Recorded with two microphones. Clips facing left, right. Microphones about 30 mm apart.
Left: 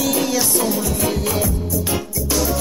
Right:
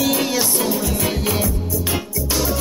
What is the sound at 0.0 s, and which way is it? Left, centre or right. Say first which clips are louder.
Music: even; centre.